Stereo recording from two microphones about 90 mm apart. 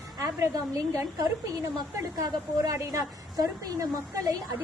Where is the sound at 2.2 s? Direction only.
40° right (ahead or behind).